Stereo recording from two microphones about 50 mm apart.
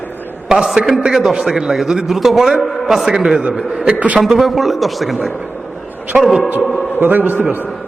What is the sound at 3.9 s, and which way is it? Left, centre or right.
Speech, right.